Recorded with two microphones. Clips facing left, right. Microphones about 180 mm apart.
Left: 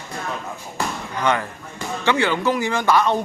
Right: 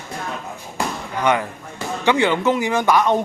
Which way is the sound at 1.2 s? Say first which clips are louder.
Right 2 dB; 15° right (ahead or behind).